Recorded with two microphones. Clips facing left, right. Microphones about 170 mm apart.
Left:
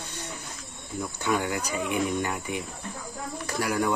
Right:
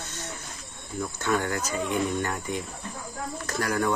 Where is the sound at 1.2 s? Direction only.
15° left (ahead or behind).